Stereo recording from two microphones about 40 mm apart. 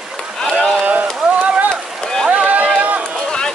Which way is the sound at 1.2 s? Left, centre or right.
Right.